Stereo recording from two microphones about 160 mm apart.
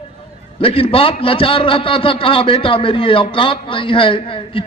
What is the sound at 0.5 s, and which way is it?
A man's voice, 35° left (ahead or behind).